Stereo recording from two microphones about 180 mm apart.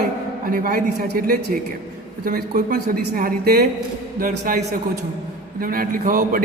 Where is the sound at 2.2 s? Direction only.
50° right (ahead or behind).